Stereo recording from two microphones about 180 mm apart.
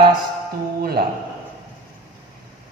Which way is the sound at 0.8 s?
60° right (ahead or behind).